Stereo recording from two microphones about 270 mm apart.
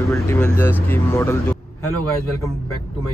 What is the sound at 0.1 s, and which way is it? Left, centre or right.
Speech, centre.